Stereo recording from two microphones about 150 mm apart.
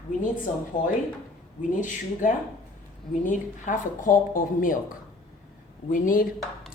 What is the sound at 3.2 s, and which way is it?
Speech, 60° left (ahead or behind).